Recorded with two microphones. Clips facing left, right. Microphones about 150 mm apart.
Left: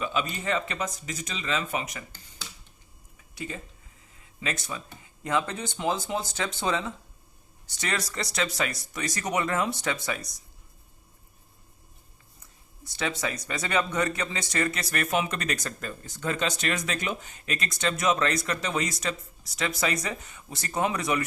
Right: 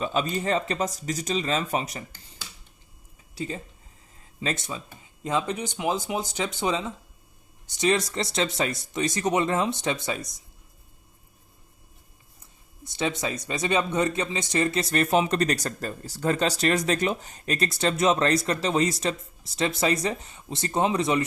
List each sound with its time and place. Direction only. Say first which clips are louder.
0.0 s speech: right 4 dB; 35° right (ahead or behind)
3.3 s speech: right 4 dB; 30° right (ahead or behind)
12.8 s speech: right 3 dB; 20° right (ahead or behind)